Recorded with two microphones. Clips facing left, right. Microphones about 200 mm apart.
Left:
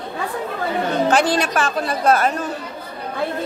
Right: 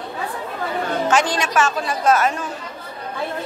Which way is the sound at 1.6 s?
35° left (ahead or behind).